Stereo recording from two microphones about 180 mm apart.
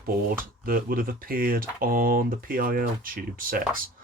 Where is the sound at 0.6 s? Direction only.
55° right (ahead or behind).